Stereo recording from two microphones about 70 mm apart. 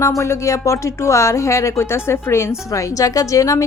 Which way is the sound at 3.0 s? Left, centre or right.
Left.